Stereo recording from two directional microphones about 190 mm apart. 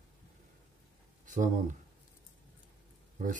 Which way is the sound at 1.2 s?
40° right (ahead or behind).